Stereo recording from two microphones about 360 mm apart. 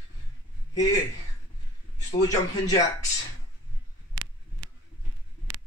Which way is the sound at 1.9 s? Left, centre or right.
Centre.